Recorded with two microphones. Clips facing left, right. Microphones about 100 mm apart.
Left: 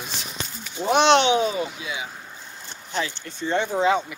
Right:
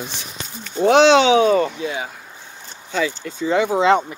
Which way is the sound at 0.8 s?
90° right.